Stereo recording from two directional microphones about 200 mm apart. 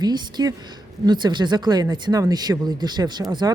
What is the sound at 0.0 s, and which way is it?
Speech, 20° right (ahead or behind).